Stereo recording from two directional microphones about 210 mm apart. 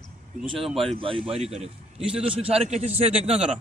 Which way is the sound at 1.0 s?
25° right (ahead or behind).